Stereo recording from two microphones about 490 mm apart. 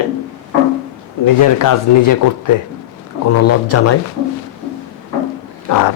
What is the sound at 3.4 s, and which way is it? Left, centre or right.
Speech, left.